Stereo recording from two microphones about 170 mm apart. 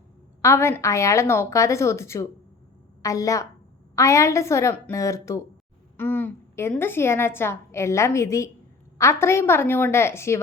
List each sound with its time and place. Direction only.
0.4 s a woman's voice: 15° left (ahead or behind)